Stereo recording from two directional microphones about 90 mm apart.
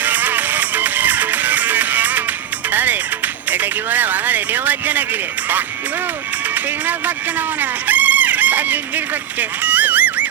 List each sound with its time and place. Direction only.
0.0 s music: 20° right (ahead or behind)
3.5 s speech: 20° right (ahead or behind)
7.6 s fowl: 20° right (ahead or behind)
9.4 s a sound: 20° right (ahead or behind)